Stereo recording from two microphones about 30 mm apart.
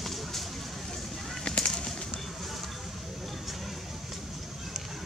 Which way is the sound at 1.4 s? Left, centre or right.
Left.